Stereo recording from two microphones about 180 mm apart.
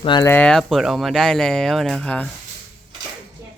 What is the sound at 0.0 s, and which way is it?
Speech, 25° left (ahead or behind).